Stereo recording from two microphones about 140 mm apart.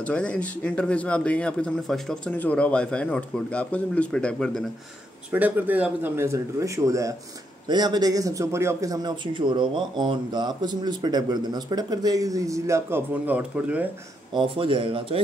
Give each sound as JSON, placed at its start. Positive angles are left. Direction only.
{"t": 0.0, "sound": "a man's voice", "side_deg": 5}
{"t": 5.3, "sound": "a man's voice", "side_deg": -10}
{"t": 14.3, "sound": "speech", "side_deg": -35}